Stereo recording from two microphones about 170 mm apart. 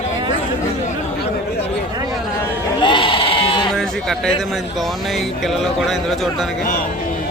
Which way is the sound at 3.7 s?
5° left (ahead or behind).